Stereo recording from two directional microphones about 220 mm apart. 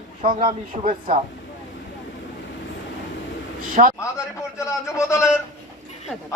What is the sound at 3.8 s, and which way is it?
Speech, 30° right (ahead or behind).